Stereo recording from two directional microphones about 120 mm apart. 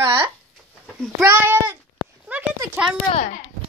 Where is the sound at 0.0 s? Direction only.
45° right (ahead or behind).